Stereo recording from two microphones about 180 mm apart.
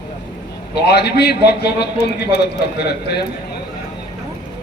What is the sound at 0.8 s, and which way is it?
Speech, 65° left (ahead or behind).